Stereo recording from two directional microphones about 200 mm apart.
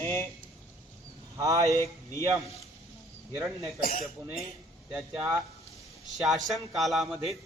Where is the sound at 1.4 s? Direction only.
15° right (ahead or behind).